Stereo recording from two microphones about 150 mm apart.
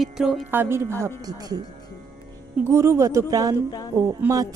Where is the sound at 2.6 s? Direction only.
15° right (ahead or behind).